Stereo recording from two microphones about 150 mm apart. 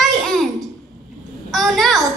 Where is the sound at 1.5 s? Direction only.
Centre (ahead or behind).